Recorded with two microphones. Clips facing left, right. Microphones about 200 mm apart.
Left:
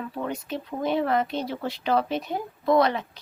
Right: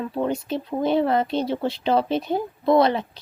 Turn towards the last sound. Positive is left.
turn(degrees=-30)  # may be behind; listen again after turning